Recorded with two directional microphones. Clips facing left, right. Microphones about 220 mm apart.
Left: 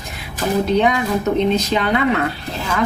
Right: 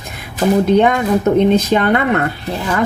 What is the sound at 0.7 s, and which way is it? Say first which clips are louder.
A woman's voice: right 4 dB; 55° right (ahead or behind).